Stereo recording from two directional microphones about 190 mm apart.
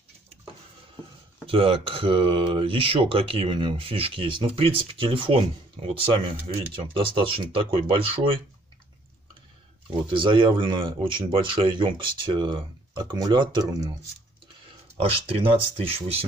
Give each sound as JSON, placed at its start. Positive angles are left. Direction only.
{"t": 1.4, "sound": "speech", "side_deg": -30}
{"t": 6.7, "sound": "speech", "side_deg": -25}
{"t": 10.0, "sound": "speech", "side_deg": -25}
{"t": 15.0, "sound": "speech", "side_deg": -30}